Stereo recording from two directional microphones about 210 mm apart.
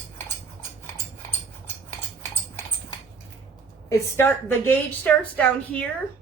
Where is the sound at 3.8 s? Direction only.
10° left (ahead or behind).